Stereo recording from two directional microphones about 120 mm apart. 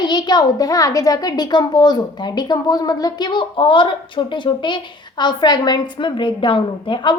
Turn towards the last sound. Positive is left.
turn(degrees=40)  # may be behind; listen again after turning